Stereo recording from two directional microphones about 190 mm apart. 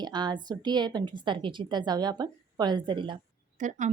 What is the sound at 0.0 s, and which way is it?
A woman's voice, 25° right (ahead or behind).